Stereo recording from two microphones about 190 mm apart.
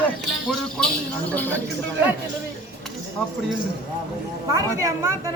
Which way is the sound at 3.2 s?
5° left (ahead or behind).